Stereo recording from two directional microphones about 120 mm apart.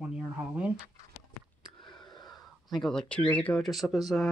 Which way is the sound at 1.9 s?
35° left (ahead or behind).